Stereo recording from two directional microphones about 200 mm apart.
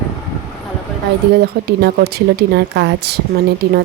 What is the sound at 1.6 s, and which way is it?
A woman's voice, 50° right (ahead or behind).